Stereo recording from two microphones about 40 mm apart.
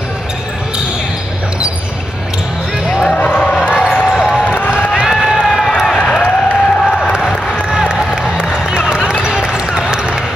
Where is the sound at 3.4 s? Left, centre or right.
Centre.